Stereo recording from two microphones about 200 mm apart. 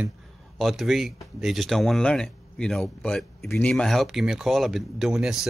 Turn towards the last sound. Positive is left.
turn(degrees=-5)  # may be behind; listen again after turning